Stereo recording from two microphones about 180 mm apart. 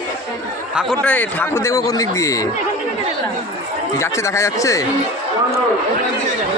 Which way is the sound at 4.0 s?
15° left (ahead or behind).